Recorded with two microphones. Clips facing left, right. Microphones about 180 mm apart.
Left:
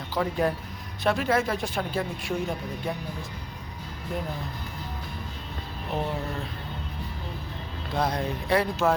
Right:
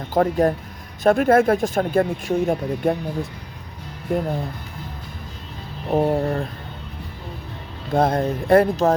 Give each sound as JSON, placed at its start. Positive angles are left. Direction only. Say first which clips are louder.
{"t": 0.1, "sound": "speech", "louder": "right 8 dB", "side_deg": -45}
{"t": 4.1, "sound": "speech", "louder": "right 10 dB", "side_deg": -55}
{"t": 5.9, "sound": "speech", "louder": "right 11 dB", "side_deg": -50}
{"t": 7.9, "sound": "speech", "louder": "right 8 dB", "side_deg": -50}